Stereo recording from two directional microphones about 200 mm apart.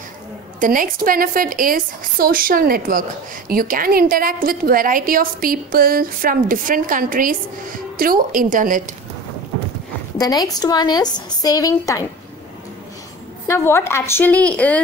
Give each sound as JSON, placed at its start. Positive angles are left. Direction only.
{"t": 0.6, "sound": "a woman's voice", "side_deg": -45}
{"t": 10.1, "sound": "a woman's voice", "side_deg": 20}
{"t": 13.5, "sound": "a woman's voice", "side_deg": 10}